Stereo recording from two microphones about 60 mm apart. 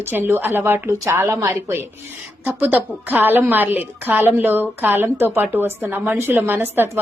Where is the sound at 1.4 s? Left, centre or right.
Right.